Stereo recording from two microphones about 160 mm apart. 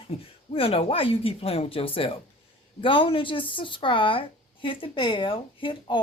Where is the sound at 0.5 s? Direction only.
35° left (ahead or behind).